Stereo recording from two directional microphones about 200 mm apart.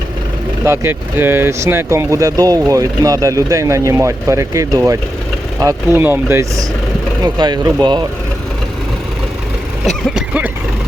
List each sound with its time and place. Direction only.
0.6 s speech: 10° right (ahead or behind)
9.8 s vehicle: 5° right (ahead or behind)